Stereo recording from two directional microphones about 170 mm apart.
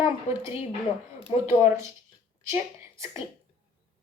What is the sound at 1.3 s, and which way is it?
Speech, 35° left (ahead or behind).